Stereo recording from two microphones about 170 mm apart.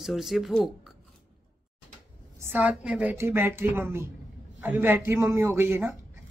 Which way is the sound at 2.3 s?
10° right (ahead or behind).